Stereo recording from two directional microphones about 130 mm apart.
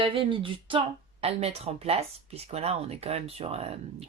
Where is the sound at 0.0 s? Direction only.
40° right (ahead or behind).